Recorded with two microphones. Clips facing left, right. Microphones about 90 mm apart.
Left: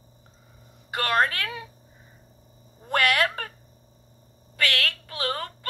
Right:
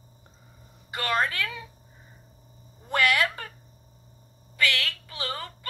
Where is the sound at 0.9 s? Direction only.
50° left (ahead or behind).